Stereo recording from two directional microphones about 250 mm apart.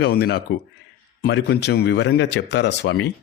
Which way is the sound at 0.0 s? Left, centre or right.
Left.